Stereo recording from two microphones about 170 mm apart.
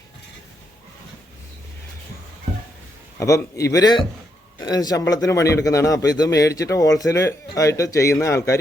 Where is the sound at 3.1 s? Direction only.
20° left (ahead or behind).